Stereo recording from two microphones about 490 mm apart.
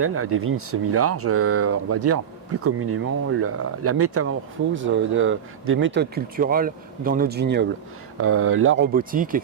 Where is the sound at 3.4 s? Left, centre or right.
Right.